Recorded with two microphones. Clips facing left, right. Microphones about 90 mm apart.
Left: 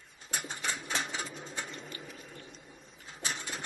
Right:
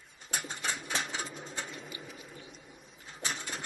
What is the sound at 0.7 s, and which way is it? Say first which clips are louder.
Rodents: even; centre (ahead or behind).